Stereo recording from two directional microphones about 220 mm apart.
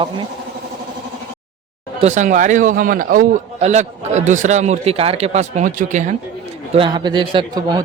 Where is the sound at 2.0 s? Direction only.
35° right (ahead or behind).